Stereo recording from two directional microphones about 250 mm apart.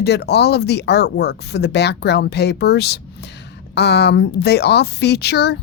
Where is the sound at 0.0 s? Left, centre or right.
Left.